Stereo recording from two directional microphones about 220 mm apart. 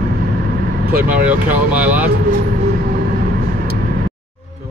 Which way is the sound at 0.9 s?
5° right (ahead or behind).